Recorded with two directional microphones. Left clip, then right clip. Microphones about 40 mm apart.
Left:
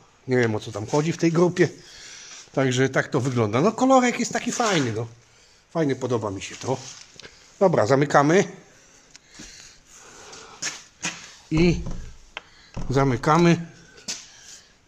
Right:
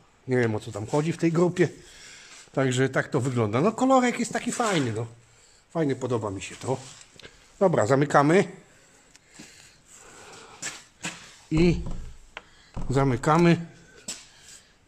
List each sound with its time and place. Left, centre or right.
0.3 s speech: centre
3.7 s speech: centre
4.7 s a man's voice: centre
7.2 s speech: centre
9.5 s a sound: centre
11.1 s a sound: right
12.8 s speech: centre